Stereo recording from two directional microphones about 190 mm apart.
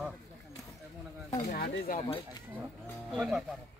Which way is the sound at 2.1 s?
25° left (ahead or behind).